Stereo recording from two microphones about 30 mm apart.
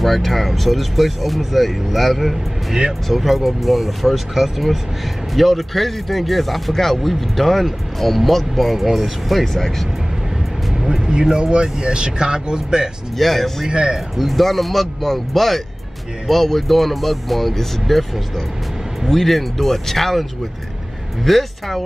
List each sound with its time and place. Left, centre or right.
0.0 s speech: centre
7.0 s speech: centre
9.5 s speech: centre
10.7 s music: centre
11.1 s speech: right
13.2 s speech: centre
13.7 s speech: right
14.1 s speech: centre